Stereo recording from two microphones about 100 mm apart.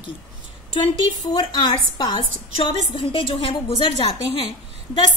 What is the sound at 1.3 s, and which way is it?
A woman's voice, 50° left (ahead or behind).